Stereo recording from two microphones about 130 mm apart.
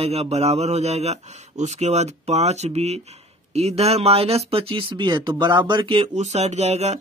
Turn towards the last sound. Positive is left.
turn(degrees=-60)  # may be behind; listen again after turning